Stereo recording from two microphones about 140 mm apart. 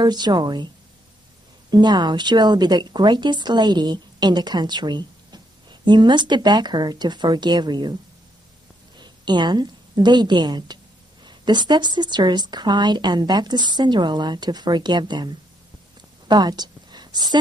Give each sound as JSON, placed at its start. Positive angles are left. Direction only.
{"t": 0.0, "sound": "a woman's voice", "side_deg": -30}
{"t": 1.7, "sound": "a woman's voice", "side_deg": -30}
{"t": 16.3, "sound": "a sound", "side_deg": -30}